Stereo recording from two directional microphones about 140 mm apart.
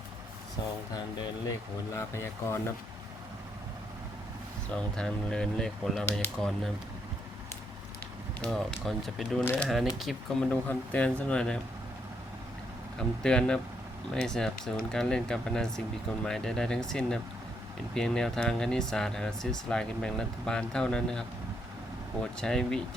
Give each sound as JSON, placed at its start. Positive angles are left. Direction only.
{"t": 1.5, "sound": "speech", "side_deg": 20}
{"t": 4.7, "sound": "speech", "side_deg": 5}
{"t": 8.4, "sound": "speech", "side_deg": 0}
{"t": 10.5, "sound": "speech", "side_deg": 10}
{"t": 13.0, "sound": "speech", "side_deg": 5}
{"t": 22.4, "sound": "speech", "side_deg": 5}